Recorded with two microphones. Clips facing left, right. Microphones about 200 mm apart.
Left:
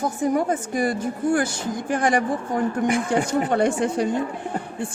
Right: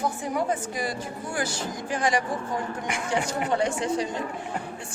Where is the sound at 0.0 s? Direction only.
45° left (ahead or behind).